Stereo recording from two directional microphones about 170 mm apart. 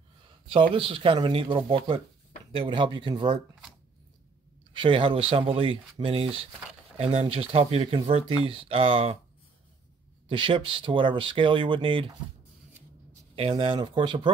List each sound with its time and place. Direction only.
0.7 s speech: 30° right (ahead or behind)
4.7 s speech: 30° right (ahead or behind)
10.2 s speech: 30° right (ahead or behind)
13.4 s speech: 35° right (ahead or behind)